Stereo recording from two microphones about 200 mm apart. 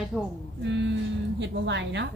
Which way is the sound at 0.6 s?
60° right (ahead or behind).